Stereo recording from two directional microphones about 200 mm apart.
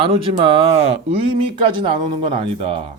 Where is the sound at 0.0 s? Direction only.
30° right (ahead or behind).